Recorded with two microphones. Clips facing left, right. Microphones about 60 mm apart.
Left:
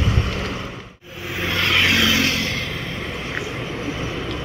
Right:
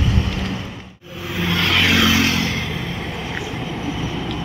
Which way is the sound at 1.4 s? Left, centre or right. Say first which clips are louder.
Right 1 dB; left.